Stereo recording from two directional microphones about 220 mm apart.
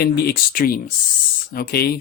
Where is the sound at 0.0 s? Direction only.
45° left (ahead or behind).